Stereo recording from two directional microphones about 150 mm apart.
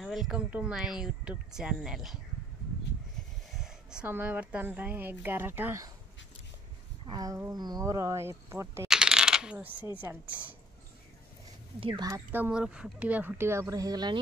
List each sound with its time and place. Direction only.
0.0 s speech: centre (ahead or behind)
3.5 s speech: 5° right (ahead or behind)
7.1 s speech: 25° right (ahead or behind)
8.8 s coin: 5° right (ahead or behind)
10.1 s speech: 20° right (ahead or behind)
11.8 s speech: 25° right (ahead or behind)
12.3 s speech: 10° right (ahead or behind); by 14.1 s 25° right (ahead or behind)